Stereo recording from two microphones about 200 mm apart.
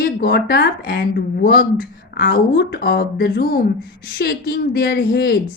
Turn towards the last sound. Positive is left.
turn(degrees=50)  # may be behind; listen again after turning